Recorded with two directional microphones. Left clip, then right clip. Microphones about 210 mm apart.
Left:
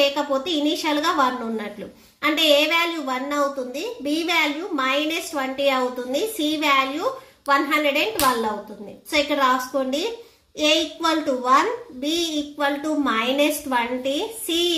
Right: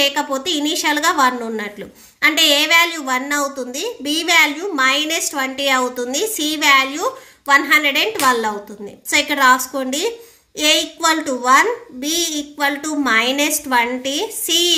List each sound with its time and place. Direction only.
0.0 s a woman's voice: 45° right (ahead or behind)